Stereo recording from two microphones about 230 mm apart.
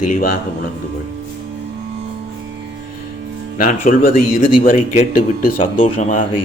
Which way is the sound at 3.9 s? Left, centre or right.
Left.